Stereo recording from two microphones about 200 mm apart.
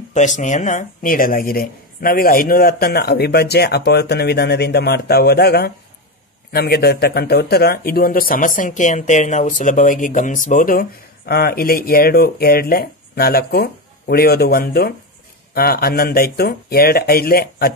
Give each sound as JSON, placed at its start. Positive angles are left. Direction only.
{"t": 0.1, "sound": "speech", "side_deg": 35}